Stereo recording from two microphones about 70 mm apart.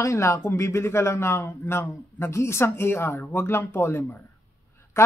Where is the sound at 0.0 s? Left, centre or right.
Left.